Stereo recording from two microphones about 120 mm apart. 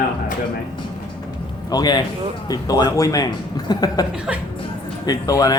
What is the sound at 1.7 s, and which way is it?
A man's voice, 35° left (ahead or behind).